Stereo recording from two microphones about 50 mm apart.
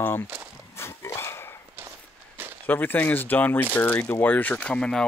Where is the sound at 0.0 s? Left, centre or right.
Left.